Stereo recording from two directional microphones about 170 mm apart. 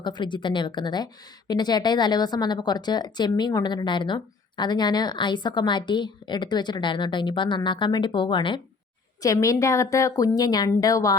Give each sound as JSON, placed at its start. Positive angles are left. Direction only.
{"t": 0.0, "sound": "a woman's voice", "side_deg": 25}